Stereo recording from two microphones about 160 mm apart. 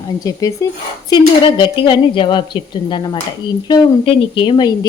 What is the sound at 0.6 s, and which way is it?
A woman's voice, 20° left (ahead or behind).